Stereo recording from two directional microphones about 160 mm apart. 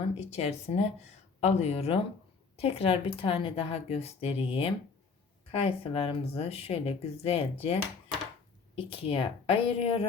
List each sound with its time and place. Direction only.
0.2 s speech: 40° left (ahead or behind)